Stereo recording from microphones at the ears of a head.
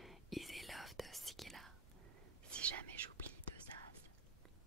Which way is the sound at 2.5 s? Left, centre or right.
Right.